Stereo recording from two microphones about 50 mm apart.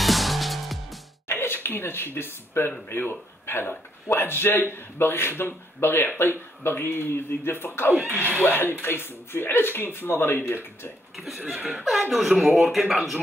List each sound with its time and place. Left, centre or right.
0.0 s music: centre
1.3 s a sound: left
2.1 s a man's voice: left
8.1 s speech: right
8.4 s a man's voice: left
11.1 s speech: centre